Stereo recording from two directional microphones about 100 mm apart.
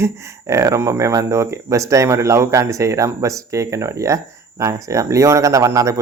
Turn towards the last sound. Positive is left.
turn(degrees=-30)  # may be behind; listen again after turning